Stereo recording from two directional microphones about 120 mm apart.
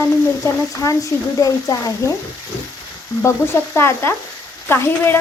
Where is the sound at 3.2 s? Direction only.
20° left (ahead or behind).